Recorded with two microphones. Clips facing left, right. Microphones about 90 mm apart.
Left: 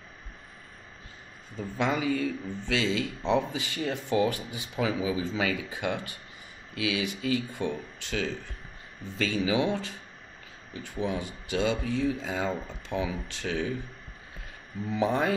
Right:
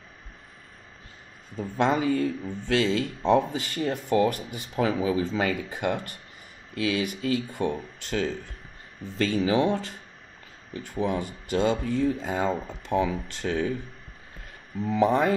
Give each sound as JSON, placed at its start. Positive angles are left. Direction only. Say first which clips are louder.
{"t": 1.9, "sound": "speech", "louder": "right 3 dB", "side_deg": -40}
{"t": 14.9, "sound": "speech", "louder": "right 5 dB", "side_deg": -45}